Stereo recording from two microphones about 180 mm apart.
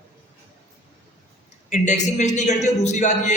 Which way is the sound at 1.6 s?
40° left (ahead or behind).